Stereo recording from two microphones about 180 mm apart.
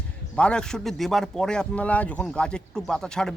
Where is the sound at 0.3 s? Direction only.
5° left (ahead or behind).